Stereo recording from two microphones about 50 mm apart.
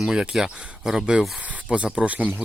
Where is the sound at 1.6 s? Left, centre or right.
Right.